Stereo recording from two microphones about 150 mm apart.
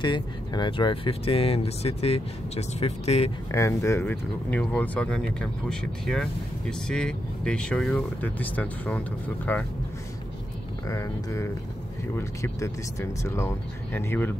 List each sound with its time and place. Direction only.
0.0 s speech: 30° left (ahead or behind)
3.5 s speech: 20° left (ahead or behind)
10.9 s speech: 20° left (ahead or behind)